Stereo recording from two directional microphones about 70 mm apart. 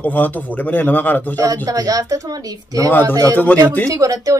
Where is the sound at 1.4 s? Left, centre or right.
Right.